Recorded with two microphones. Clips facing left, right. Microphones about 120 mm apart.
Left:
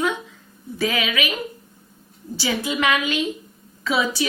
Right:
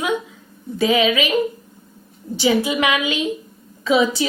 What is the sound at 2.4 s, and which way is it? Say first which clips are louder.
A woman's voice: right 6 dB; 15° right (ahead or behind).